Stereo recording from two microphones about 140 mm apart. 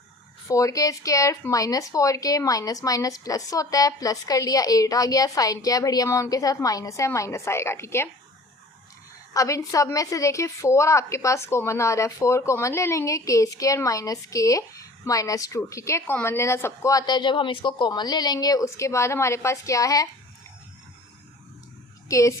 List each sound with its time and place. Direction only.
0.4 s a woman's voice: 25° left (ahead or behind)
9.3 s a woman's voice: 25° left (ahead or behind)
22.1 s a woman's voice: 25° left (ahead or behind)